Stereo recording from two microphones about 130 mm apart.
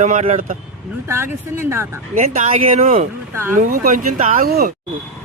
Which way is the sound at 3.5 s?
90° right.